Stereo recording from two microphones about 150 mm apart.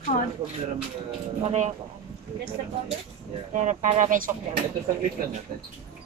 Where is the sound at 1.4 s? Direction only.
45° right (ahead or behind).